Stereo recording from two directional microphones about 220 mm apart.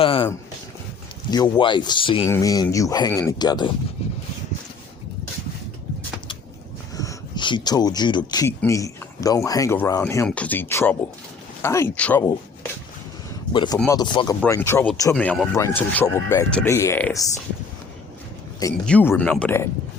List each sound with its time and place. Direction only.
0.0 s a sound: 25° left (ahead or behind)
1.3 s speech: 20° left (ahead or behind)
6.9 s speech: 15° left (ahead or behind)
13.5 s speech: 20° left (ahead or behind)
18.9 s speech: 5° left (ahead or behind)